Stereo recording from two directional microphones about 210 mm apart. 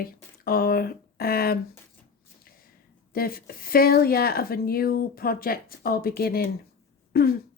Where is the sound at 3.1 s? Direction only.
45° left (ahead or behind).